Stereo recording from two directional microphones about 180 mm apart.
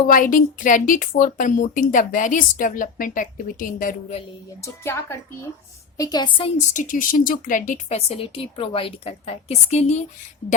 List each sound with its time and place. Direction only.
0.1 s a woman's voice: 50° left (ahead or behind)
4.6 s a woman's voice: 15° left (ahead or behind)
6.7 s speech: 50° left (ahead or behind)